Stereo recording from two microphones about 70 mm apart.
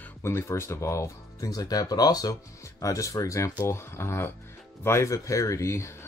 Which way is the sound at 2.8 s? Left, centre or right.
Left.